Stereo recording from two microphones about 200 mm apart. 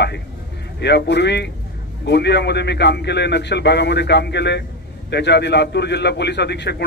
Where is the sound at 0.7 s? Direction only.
60° left (ahead or behind).